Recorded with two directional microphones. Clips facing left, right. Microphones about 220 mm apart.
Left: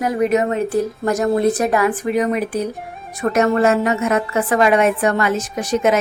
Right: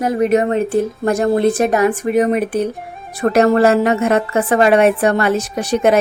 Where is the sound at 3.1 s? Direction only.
35° right (ahead or behind).